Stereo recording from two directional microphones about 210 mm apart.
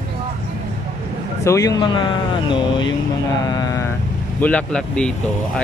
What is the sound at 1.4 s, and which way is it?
Speech, 15° left (ahead or behind).